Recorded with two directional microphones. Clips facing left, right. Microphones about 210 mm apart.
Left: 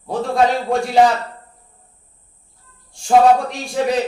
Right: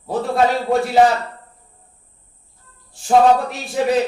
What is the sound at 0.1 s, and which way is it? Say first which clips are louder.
Speech: even; centre (ahead or behind).